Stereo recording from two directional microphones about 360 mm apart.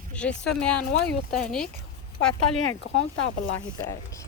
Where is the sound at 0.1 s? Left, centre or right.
Centre.